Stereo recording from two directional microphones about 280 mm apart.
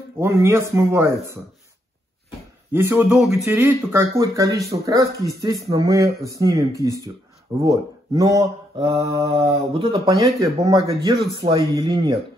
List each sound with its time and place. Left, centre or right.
0.2 s speech: centre
2.7 s speech: centre